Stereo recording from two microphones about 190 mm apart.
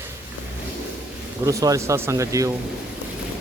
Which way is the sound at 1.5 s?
15° right (ahead or behind).